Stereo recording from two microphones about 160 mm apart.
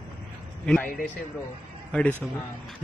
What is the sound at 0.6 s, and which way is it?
Speech, 5° left (ahead or behind).